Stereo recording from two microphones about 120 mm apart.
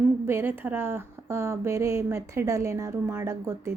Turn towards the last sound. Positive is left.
turn(degrees=-20)  # may be behind; listen again after turning